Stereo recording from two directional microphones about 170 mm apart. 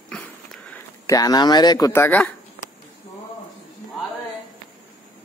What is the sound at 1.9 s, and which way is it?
Speech, 10° left (ahead or behind).